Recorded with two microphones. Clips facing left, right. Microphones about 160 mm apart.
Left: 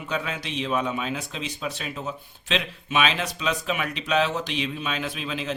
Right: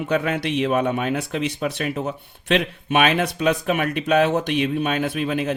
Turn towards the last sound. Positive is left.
turn(degrees=-55)  # may be behind; listen again after turning